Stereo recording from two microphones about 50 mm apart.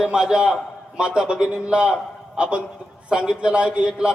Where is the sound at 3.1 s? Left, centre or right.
Centre.